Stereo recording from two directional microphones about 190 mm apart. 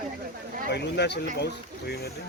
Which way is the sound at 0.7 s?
65° left (ahead or behind).